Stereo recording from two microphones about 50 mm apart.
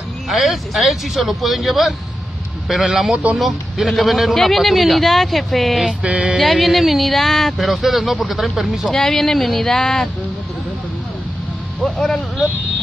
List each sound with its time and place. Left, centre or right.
0.3 s a man's voice: centre
6.0 s music: centre
6.3 s a man's voice: centre
8.9 s speech: centre
11.8 s speech: centre